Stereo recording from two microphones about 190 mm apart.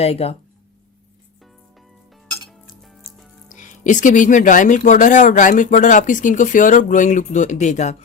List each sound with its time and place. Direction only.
0.0 s speech: 35° left (ahead or behind)
2.5 s dishes: centre (ahead or behind)
3.5 s speech: 40° left (ahead or behind)